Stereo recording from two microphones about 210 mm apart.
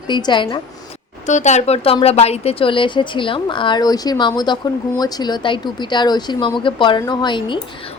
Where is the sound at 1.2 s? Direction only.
35° left (ahead or behind).